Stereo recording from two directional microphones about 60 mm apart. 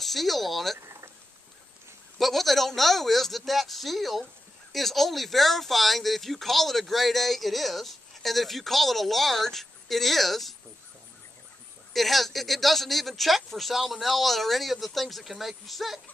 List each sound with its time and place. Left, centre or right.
0.0 s speech: centre
2.1 s speech: centre
11.9 s speech: centre